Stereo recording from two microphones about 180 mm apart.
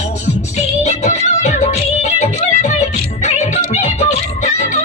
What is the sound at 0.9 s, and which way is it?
Music, 40° left (ahead or behind).